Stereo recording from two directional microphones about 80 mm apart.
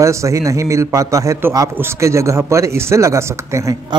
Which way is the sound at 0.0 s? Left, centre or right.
Right.